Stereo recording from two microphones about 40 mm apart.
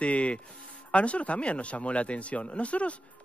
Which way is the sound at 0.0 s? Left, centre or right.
Left.